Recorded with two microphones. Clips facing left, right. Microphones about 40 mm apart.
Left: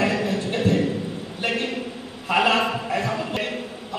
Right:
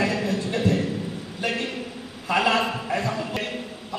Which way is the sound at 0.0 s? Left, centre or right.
Left.